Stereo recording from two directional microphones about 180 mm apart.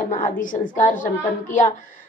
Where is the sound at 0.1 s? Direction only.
45° left (ahead or behind).